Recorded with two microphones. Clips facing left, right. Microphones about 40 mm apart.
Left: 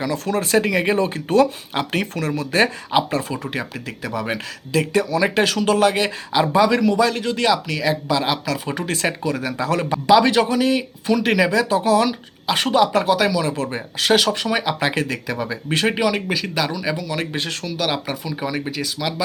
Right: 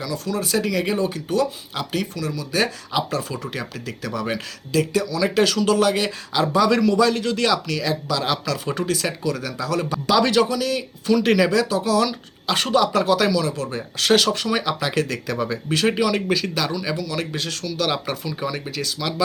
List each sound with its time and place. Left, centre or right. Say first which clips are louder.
0.0 s speech: left 4 dB; left
0.9 s speech: left 5 dB; left; by 4.4 s centre
4.7 s speech: left 2 dB; left; by 8.9 s centre
8.9 s speech: left 5 dB; left
9.9 s speech: left 4 dB; centre
11.2 s a man's voice: even; centre
11.7 s speech: left 3 dB; left
12.5 s a man's voice: left 2 dB; centre
13.4 s speech: left 2 dB; left
14.0 s a man's voice: left 1 dB; centre; by 17.7 s left
17.7 s a man's voice: even; centre